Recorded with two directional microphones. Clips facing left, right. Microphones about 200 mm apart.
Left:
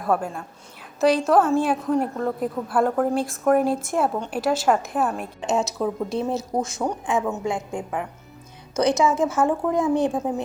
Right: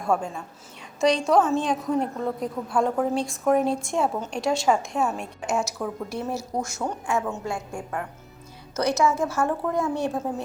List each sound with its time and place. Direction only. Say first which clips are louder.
0.0 s a woman's voice: left 2 dB; 5° left (ahead or behind)
5.4 s speech: left 4 dB; 20° left (ahead or behind)